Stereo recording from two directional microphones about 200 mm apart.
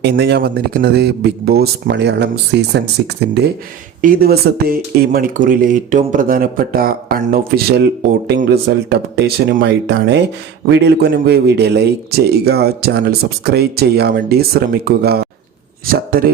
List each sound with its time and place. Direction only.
0.0 s a man's voice: 55° right (ahead or behind)